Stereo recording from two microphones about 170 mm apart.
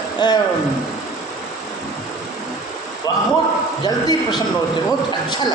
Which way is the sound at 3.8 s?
25° left (ahead or behind).